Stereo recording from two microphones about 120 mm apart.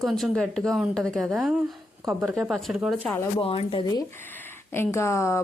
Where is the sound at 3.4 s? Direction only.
50° left (ahead or behind).